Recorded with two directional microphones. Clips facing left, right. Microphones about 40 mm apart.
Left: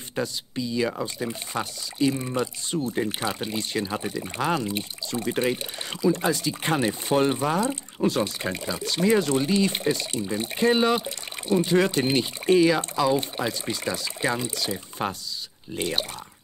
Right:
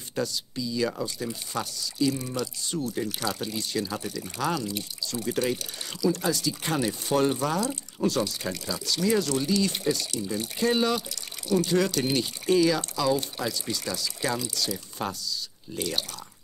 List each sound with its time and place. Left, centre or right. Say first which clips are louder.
0.1 s speech: left 1 dB; left